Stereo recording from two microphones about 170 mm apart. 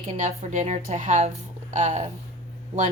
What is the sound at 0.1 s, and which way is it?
Speech, 45° right (ahead or behind).